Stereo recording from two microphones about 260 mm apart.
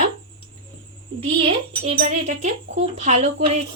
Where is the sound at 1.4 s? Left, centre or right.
Right.